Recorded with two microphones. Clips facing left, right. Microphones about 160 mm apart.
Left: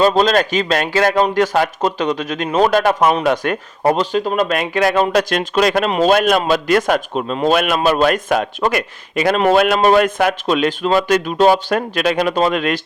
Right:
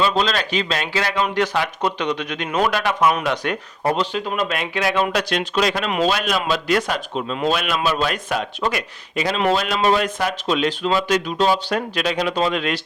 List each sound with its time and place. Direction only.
0.0 s a man's voice: 45° left (ahead or behind)